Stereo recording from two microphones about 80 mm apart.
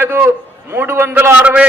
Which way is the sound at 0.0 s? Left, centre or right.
Right.